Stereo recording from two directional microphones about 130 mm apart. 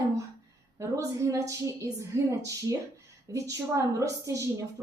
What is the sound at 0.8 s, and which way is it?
A woman's voice, 25° right (ahead or behind).